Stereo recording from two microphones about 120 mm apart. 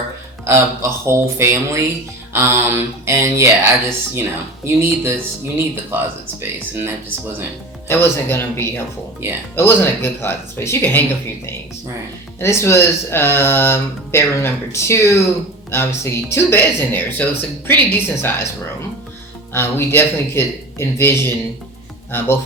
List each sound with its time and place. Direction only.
0.4 s speech: 20° right (ahead or behind)
7.9 s speech: 20° left (ahead or behind)
9.2 s speech: 20° right (ahead or behind)
9.6 s speech: 20° left (ahead or behind)
12.4 s speech: 20° left (ahead or behind)
19.5 s speech: 20° left (ahead or behind)